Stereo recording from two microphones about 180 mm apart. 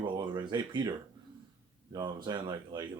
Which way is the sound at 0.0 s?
25° right (ahead or behind).